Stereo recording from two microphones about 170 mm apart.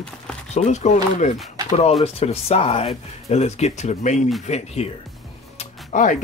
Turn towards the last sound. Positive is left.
turn(degrees=45)  # may be behind; listen again after turning